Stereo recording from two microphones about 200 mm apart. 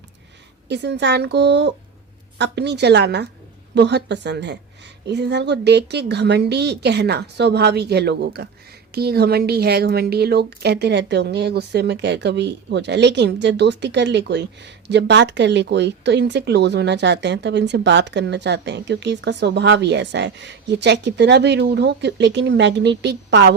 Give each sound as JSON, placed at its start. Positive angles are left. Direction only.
{"t": 0.7, "sound": "a woman's voice", "side_deg": -60}